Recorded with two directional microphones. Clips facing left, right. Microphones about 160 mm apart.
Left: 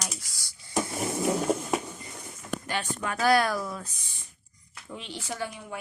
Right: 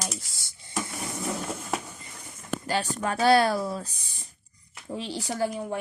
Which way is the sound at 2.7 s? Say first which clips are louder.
Right 5 dB; 35° right (ahead or behind).